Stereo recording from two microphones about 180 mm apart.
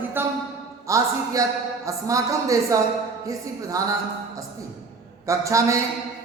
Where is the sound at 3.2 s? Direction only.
20° right (ahead or behind).